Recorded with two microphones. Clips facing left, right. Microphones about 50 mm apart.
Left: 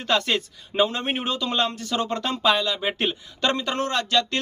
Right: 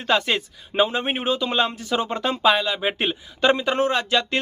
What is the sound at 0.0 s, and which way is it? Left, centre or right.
Speech, centre.